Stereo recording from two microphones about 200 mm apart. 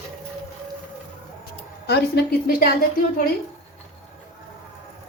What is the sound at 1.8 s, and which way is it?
Speech, 55° left (ahead or behind).